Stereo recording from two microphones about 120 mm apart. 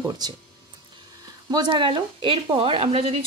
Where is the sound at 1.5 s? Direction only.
40° right (ahead or behind).